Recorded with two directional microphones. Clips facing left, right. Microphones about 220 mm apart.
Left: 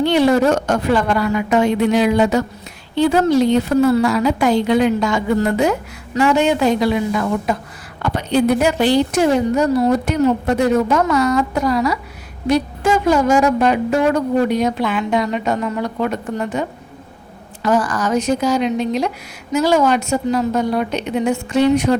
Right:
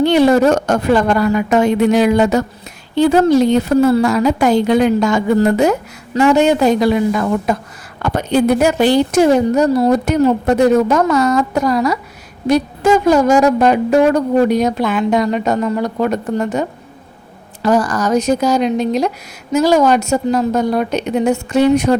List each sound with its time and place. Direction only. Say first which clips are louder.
0.0 s a woman's voice: right 3 dB; 45° right (ahead or behind)